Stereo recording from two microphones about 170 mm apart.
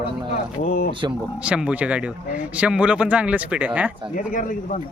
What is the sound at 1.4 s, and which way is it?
Speech, 5° right (ahead or behind).